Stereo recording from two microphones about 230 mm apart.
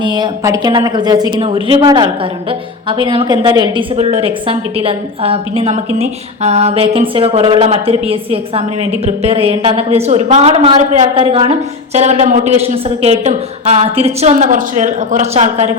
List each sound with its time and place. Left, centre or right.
0.0 s a woman's voice: centre